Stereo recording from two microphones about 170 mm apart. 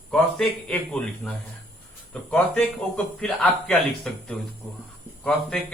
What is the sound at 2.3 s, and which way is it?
A man's voice, 5° left (ahead or behind).